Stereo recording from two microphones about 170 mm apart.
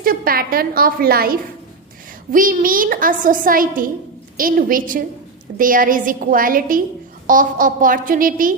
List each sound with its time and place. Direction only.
0.0 s a woman's voice: 60° right (ahead or behind)